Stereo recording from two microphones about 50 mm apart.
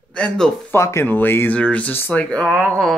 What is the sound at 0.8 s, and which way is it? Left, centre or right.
Speech, left.